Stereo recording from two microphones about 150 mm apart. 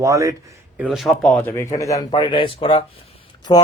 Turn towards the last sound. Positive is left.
turn(degrees=30)  # may be behind; listen again after turning